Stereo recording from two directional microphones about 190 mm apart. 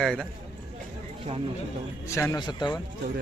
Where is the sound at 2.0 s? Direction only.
15° left (ahead or behind).